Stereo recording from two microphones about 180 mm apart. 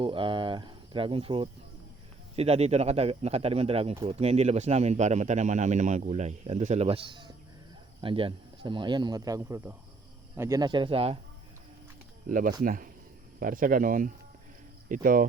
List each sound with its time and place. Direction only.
0.0 s speech: 30° right (ahead or behind)
12.3 s speech: 45° right (ahead or behind)